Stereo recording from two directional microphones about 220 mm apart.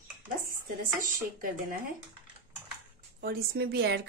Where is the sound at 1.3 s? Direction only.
40° right (ahead or behind).